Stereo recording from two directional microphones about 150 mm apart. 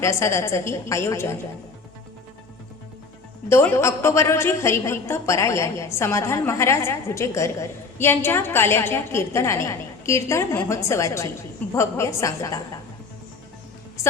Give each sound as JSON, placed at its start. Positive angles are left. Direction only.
{"t": 0.0, "sound": "a woman's voice", "side_deg": 20}
{"t": 3.5, "sound": "a woman's voice", "side_deg": 15}